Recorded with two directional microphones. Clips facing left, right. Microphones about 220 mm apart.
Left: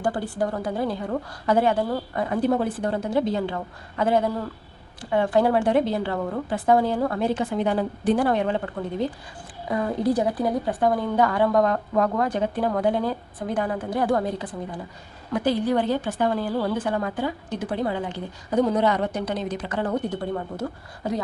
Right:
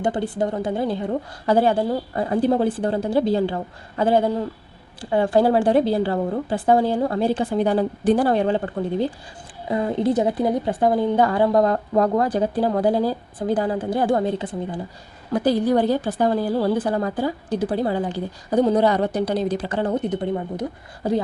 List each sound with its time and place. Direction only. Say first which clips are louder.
0.0 s a woman's voice: right 3 dB; 20° right (ahead or behind)
15.3 s a woman's voice: right 4 dB; 40° right (ahead or behind); by 20.7 s 20° right (ahead or behind)
21.0 s a woman's voice: right 6 dB; 35° right (ahead or behind)